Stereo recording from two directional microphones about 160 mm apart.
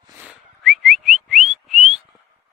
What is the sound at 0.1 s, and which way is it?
Whistling, 10° right (ahead or behind).